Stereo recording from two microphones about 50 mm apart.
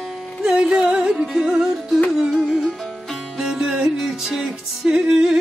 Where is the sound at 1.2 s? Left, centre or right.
Centre.